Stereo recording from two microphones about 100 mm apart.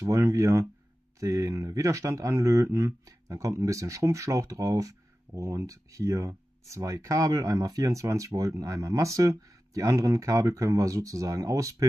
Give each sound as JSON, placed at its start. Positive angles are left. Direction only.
{"t": 0.0, "sound": "speech", "side_deg": -35}